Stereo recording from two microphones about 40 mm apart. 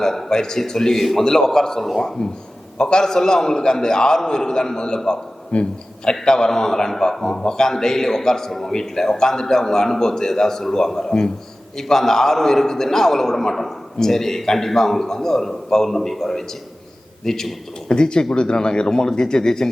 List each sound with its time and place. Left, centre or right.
0.0 s a man's voice: centre
5.5 s speech: left
6.1 s a man's voice: centre
17.8 s speech: left